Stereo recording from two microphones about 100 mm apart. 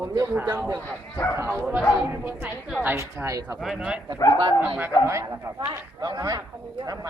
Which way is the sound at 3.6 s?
5° right (ahead or behind).